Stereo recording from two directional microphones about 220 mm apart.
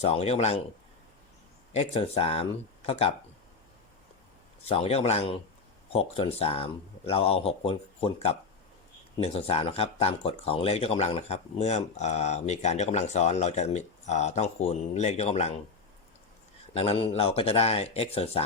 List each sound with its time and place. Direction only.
0.0 s speech: 30° left (ahead or behind)
1.7 s speech: 25° left (ahead or behind)
4.6 s speech: 25° left (ahead or behind)
16.7 s speech: 25° left (ahead or behind)